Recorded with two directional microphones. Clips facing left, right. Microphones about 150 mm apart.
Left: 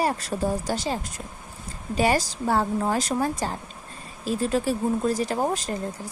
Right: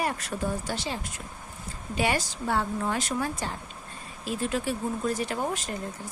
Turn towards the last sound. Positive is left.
turn(degrees=35)  # may be behind; listen again after turning